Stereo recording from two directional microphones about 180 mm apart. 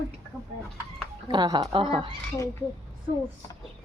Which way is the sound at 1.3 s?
25° right (ahead or behind).